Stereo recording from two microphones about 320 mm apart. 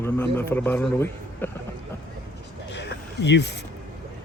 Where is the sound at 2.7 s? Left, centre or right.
Left.